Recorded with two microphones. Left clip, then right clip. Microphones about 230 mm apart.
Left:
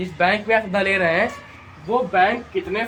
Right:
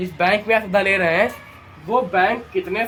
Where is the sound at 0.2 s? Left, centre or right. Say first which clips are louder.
Right 1 dB; centre.